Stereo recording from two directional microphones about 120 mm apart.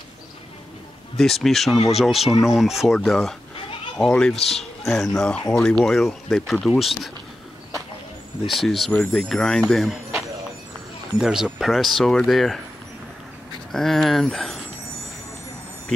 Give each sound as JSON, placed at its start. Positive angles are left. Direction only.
{"t": 1.1, "sound": "speech", "side_deg": 0}
{"t": 8.5, "sound": "speech", "side_deg": 0}
{"t": 13.7, "sound": "a sound", "side_deg": 5}